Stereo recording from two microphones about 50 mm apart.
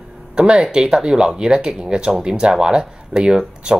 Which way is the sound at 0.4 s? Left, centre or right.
Centre.